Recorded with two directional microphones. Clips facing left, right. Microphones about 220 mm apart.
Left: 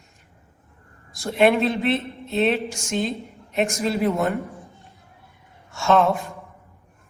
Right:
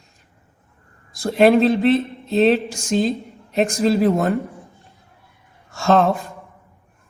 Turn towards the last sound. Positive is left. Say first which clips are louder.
# right 2 dB
turn(degrees=-35)  # may be behind; listen again after turning